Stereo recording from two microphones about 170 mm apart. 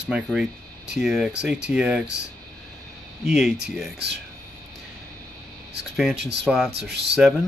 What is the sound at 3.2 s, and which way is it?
Speech, 5° right (ahead or behind).